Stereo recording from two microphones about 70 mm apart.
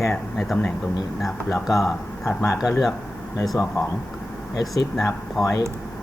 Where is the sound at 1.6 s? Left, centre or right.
Centre.